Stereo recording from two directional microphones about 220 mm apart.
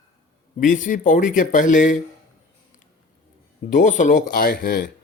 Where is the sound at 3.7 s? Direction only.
35° left (ahead or behind).